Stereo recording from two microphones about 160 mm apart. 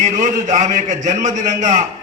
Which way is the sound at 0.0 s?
50° right (ahead or behind).